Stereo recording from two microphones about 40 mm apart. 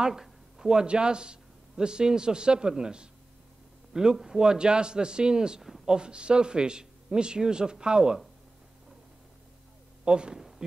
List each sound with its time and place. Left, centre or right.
0.0 s a man's voice: centre
10.0 s speech: right